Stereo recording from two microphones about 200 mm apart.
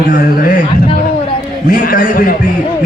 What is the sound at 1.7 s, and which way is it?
Speech, 45° left (ahead or behind).